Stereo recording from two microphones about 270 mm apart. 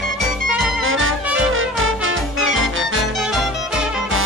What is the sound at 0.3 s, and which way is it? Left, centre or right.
Music, centre.